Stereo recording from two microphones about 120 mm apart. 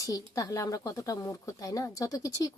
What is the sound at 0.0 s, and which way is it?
Speech, 30° left (ahead or behind).